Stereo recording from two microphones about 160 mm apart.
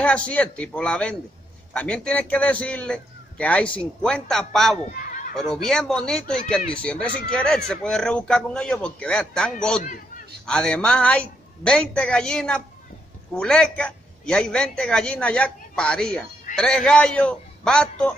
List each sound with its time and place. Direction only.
0.0 s a man's voice: 10° left (ahead or behind)
9.8 s a man's voice: 55° left (ahead or behind)
10.4 s speech: 5° left (ahead or behind)